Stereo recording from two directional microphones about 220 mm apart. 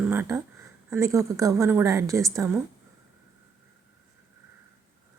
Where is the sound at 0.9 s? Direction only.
15° right (ahead or behind).